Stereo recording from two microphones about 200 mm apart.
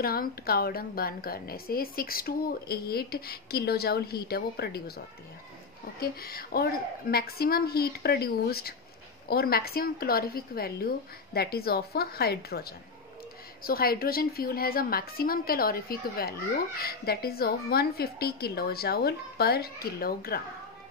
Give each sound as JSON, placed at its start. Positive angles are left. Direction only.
{"t": 0.0, "sound": "a woman's voice", "side_deg": 50}